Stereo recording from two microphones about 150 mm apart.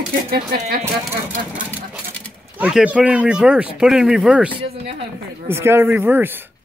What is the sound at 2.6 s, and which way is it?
Speech, 5° right (ahead or behind).